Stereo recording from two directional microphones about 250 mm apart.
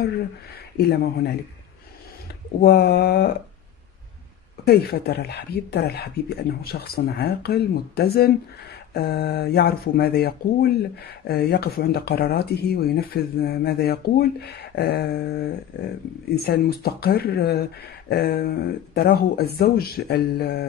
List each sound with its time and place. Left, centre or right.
0.7 s speech: left
2.6 s speech: left
4.6 s speech: left